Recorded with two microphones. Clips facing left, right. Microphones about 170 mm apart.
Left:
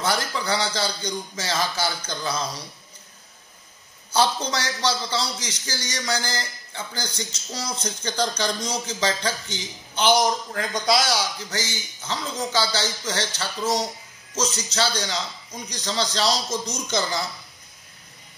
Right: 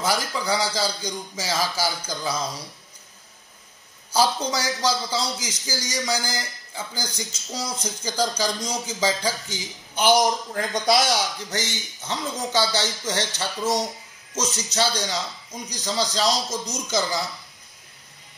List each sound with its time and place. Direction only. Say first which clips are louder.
0.0 s a man's voice: even; 5° right (ahead or behind)
4.1 s a man's voice: even; centre (ahead or behind)
10.5 s speech: right 1 dB; 20° right (ahead or behind)
14.7 s speech: right 1 dB; 15° right (ahead or behind)
15.2 s a man's voice: right 1 dB; 5° right (ahead or behind)